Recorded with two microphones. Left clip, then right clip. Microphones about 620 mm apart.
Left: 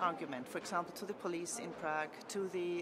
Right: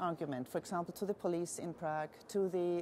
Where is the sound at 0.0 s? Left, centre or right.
Right.